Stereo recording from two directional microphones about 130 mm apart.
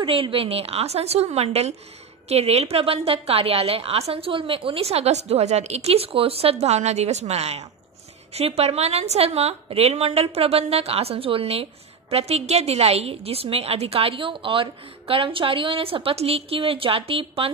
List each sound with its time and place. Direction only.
0.0 s a woman's voice: 45° right (ahead or behind)